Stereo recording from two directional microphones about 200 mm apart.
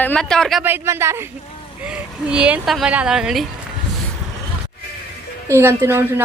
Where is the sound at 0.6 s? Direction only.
10° right (ahead or behind).